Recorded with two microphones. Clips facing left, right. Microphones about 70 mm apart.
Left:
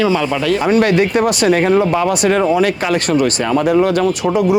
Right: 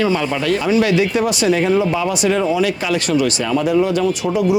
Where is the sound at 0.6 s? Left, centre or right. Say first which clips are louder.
Left 3 dB; left.